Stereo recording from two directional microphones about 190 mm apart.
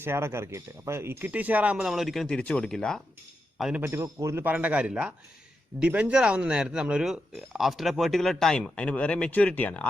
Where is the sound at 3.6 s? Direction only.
10° right (ahead or behind).